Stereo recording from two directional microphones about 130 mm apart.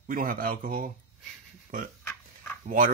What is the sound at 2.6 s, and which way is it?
Speech, 90° right.